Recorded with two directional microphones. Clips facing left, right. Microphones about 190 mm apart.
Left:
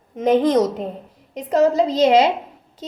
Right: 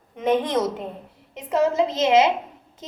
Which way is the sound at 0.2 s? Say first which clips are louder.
Left 6 dB; 40° left (ahead or behind).